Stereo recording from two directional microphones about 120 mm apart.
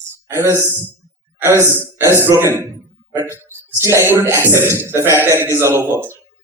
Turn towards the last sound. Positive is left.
turn(degrees=-20)  # may be behind; listen again after turning